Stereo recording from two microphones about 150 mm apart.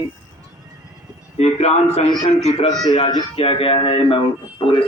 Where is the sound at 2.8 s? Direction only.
30° left (ahead or behind).